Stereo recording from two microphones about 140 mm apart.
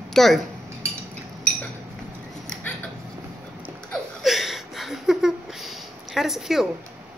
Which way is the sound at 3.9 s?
Centre (ahead or behind).